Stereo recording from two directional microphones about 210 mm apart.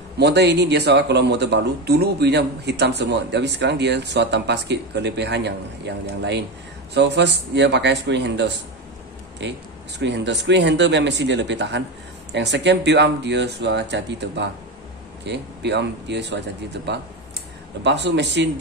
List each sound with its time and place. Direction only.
0.2 s speech: 55° right (ahead or behind)